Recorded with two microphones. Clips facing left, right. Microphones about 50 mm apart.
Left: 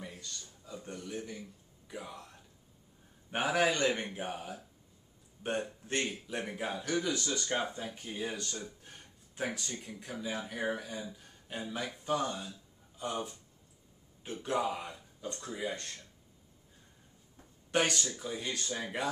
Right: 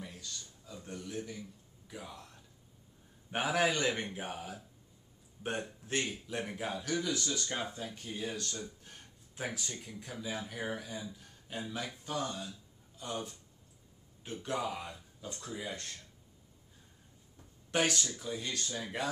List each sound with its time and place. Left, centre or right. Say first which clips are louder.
0.2 s a sound: even; centre
1.0 s speech: right 2 dB; centre
8.9 s a sound: left 1 dB; centre
9.3 s speech: left 3 dB; centre
15.1 s speech: left 5 dB; centre
17.6 s speech: left 1 dB; centre